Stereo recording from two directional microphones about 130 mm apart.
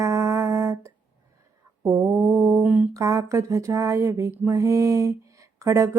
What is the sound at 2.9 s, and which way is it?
Speech, 25° right (ahead or behind).